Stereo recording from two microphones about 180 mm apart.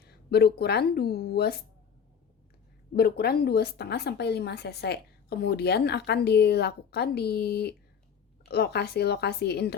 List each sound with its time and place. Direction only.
0.0 s speech: 65° left (ahead or behind)
2.9 s speech: 60° left (ahead or behind)